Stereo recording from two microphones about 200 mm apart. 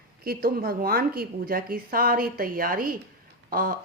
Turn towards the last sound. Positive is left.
turn(degrees=-45)  # may be behind; listen again after turning